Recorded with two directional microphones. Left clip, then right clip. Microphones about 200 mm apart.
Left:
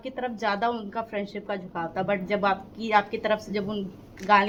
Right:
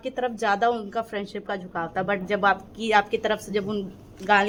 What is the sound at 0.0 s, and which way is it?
A woman's voice, 30° right (ahead or behind).